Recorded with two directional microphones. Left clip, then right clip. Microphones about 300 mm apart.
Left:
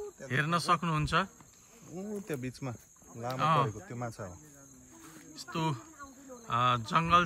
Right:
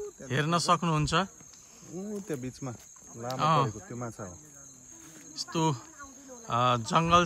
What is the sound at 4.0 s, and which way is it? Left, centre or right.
Speech, left.